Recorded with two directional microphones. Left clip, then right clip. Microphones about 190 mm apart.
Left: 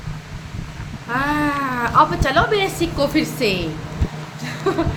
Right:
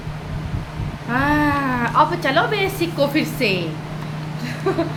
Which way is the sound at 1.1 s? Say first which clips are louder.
Right 2 dB; 10° left (ahead or behind).